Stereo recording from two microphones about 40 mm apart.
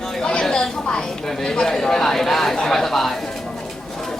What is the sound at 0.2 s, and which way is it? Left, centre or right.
Chatter, left.